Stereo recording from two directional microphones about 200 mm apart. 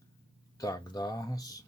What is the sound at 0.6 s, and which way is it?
Speech, 20° left (ahead or behind).